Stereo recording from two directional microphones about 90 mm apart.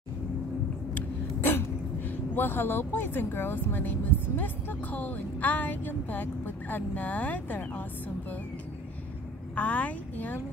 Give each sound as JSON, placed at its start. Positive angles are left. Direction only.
{"t": 0.9, "sound": "speech", "side_deg": 25}
{"t": 9.6, "sound": "a woman's voice", "side_deg": 15}